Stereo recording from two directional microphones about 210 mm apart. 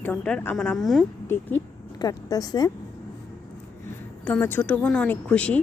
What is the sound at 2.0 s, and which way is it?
Speech, 15° left (ahead or behind).